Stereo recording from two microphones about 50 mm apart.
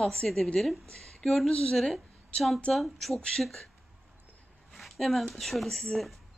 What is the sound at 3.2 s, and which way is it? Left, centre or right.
Speech, left.